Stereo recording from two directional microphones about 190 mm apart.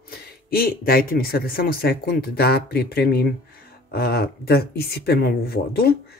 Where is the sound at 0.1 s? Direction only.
55° left (ahead or behind).